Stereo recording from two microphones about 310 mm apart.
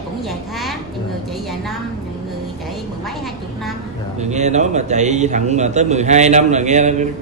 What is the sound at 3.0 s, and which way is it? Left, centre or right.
Speech, centre.